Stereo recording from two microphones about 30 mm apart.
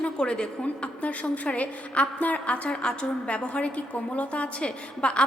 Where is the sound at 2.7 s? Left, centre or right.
Left.